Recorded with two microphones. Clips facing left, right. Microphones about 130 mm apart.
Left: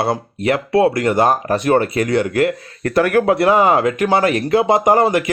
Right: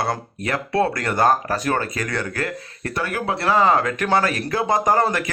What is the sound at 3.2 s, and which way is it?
Speech, 20° left (ahead or behind).